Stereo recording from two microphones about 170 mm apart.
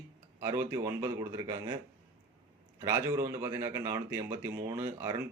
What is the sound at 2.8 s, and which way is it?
Speech, 15° right (ahead or behind).